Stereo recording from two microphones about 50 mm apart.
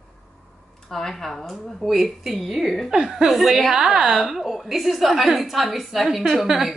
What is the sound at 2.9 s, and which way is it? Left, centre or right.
A woman's voice, centre.